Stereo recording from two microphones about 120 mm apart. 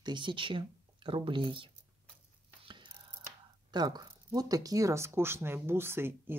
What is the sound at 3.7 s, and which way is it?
Speech, 35° right (ahead or behind).